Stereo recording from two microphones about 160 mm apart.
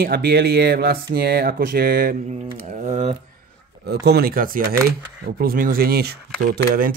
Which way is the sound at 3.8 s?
90° right.